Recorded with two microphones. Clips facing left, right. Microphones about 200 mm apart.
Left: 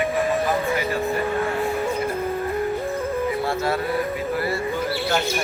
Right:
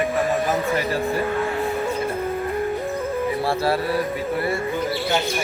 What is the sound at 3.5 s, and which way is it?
Music, 35° right (ahead or behind).